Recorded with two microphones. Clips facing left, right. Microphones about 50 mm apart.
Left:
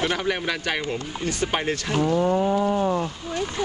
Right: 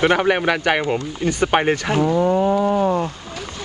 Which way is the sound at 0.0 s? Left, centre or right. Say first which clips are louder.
Right 8 dB; right.